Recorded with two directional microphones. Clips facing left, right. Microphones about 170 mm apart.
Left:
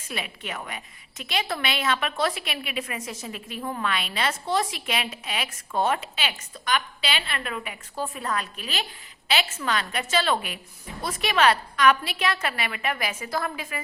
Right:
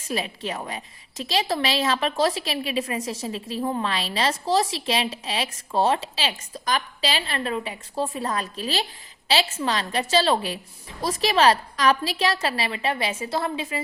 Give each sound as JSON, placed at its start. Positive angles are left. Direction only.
{"t": 0.1, "sound": "a woman's voice", "side_deg": -35}